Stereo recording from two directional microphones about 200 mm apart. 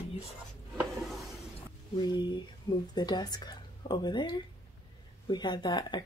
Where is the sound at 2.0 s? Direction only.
20° left (ahead or behind).